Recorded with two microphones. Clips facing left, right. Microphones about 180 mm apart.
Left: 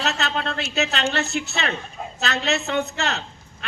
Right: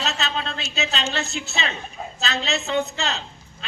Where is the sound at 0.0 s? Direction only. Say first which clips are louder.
Left 2 dB; 60° left (ahead or behind).